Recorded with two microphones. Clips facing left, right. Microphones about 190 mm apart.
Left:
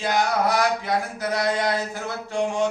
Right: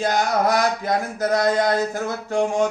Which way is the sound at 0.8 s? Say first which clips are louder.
Right 3 dB; 45° right (ahead or behind).